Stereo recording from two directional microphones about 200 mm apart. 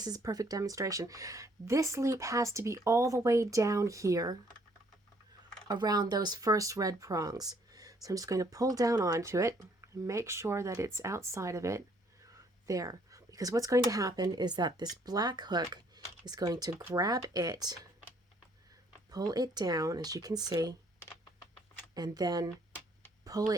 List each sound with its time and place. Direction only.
0.0 s speech: 20° right (ahead or behind)
5.6 s speech: 20° right (ahead or behind)
19.1 s speech: 20° right (ahead or behind)
21.9 s speech: 20° right (ahead or behind)